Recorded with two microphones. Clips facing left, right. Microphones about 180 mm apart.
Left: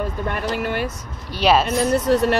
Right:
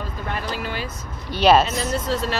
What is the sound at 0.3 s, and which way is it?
Speech, 60° left (ahead or behind).